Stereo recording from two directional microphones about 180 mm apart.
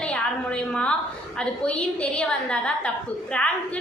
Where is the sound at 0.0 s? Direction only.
5° left (ahead or behind).